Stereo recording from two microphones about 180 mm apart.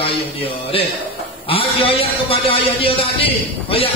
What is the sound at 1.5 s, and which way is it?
A man's voice, 30° left (ahead or behind).